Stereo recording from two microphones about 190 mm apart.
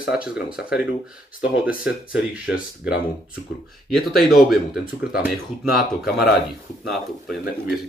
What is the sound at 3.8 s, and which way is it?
Speech, centre (ahead or behind).